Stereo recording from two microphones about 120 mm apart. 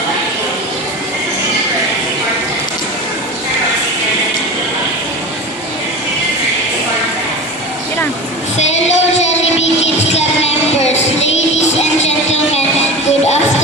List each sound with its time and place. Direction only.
8.5 s child singing: 70° left (ahead or behind)
10.7 s music: 65° left (ahead or behind)